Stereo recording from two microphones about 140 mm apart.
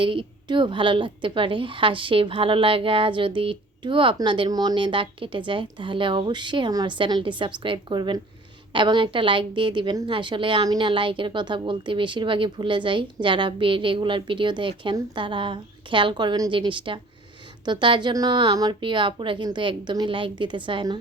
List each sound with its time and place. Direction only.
0.0 s a woman's voice: 35° right (ahead or behind)